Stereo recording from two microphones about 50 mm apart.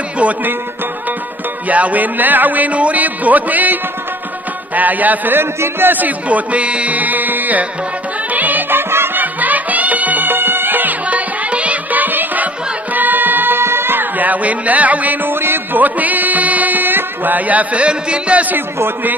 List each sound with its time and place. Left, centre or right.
0.2 s speech: right
1.7 s speech: right
8.3 s music: right
9.2 s music: right
15.2 s music: right